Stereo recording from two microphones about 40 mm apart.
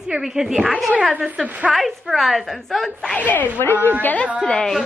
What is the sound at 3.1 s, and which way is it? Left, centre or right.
Speech, left.